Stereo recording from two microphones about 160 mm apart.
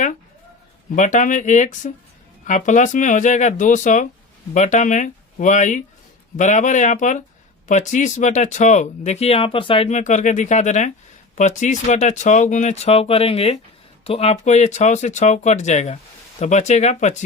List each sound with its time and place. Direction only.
0.9 s speech: 50° left (ahead or behind)